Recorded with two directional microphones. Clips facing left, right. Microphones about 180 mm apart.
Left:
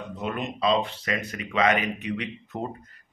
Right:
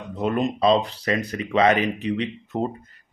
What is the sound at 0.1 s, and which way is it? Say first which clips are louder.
Speech: right 9 dB; 35° right (ahead or behind).